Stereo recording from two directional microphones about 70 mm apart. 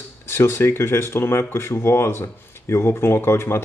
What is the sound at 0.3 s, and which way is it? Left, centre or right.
Speech, left.